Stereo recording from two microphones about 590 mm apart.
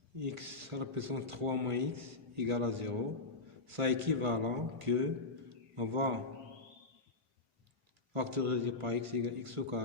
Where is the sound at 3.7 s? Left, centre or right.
Right.